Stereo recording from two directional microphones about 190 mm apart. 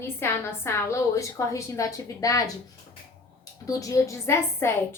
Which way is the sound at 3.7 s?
15° left (ahead or behind).